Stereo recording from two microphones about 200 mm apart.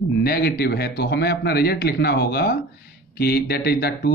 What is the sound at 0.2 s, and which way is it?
A man's voice, 50° left (ahead or behind).